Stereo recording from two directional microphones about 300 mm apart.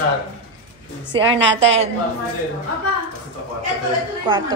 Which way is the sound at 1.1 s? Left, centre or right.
Centre.